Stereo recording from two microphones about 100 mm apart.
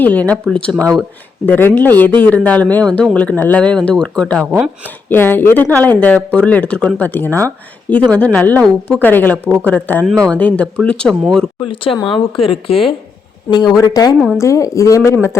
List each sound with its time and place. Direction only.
0.0 s speech: 15° left (ahead or behind)
1.5 s speech: 20° left (ahead or behind)
5.0 s speech: 20° left (ahead or behind); by 11.4 s centre (ahead or behind)
11.6 s speech: 60° left (ahead or behind)
13.5 s speech: 45° left (ahead or behind)
14.2 s speech: 5° right (ahead or behind)
14.4 s speech: 30° left (ahead or behind)